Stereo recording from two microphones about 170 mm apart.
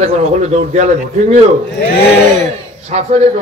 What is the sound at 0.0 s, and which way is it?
Speech, 40° right (ahead or behind).